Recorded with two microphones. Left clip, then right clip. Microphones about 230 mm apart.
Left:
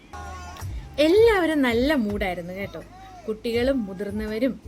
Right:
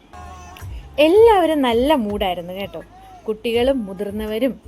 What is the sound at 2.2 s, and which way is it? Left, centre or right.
Speech, right.